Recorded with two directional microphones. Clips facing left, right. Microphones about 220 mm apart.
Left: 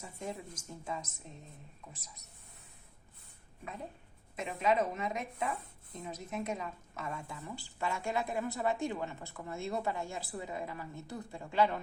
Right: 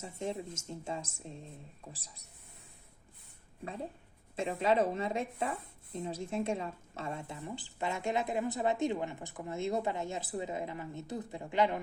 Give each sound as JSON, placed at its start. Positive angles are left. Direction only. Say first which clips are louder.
{"t": 0.0, "sound": "speech", "louder": "right 4 dB", "side_deg": -25}
{"t": 3.6, "sound": "speech", "louder": "right 4 dB", "side_deg": -30}